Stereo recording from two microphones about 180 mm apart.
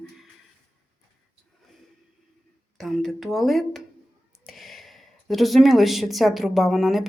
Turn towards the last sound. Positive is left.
turn(degrees=0)  # may be behind; listen again after turning